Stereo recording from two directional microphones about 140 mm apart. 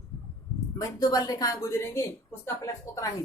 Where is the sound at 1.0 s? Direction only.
25° left (ahead or behind).